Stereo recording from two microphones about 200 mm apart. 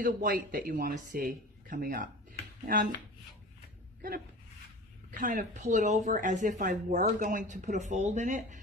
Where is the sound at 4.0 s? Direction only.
45° right (ahead or behind).